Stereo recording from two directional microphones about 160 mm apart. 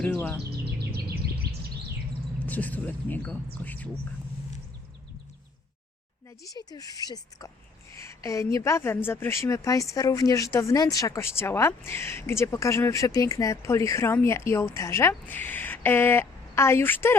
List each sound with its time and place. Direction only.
0.0 s speech: 10° left (ahead or behind)
0.5 s bird: 85° right
2.5 s speech: 10° left (ahead or behind)
6.7 s speech: 20° left (ahead or behind)